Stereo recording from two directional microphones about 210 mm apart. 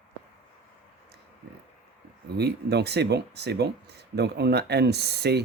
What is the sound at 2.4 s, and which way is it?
Speech, 50° right (ahead or behind).